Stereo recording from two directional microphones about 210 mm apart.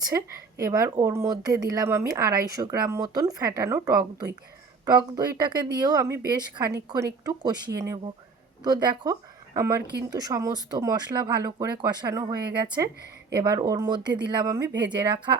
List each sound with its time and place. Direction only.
0.1 s speech: 15° right (ahead or behind)